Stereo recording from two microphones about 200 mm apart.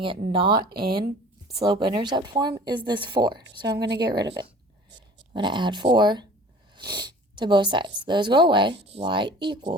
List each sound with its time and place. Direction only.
0.3 s speech: 25° right (ahead or behind)
5.3 s speech: 25° right (ahead or behind)